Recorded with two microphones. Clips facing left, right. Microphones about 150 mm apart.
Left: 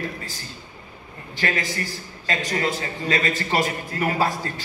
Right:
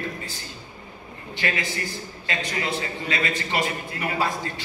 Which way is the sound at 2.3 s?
40° left (ahead or behind).